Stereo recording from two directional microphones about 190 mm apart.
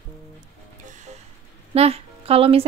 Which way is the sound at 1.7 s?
35° right (ahead or behind).